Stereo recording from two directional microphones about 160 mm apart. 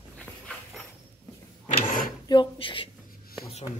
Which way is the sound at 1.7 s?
55° left (ahead or behind).